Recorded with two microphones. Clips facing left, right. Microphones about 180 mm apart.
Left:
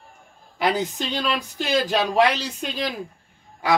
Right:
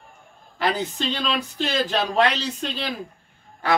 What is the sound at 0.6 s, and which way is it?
Speech, 15° left (ahead or behind).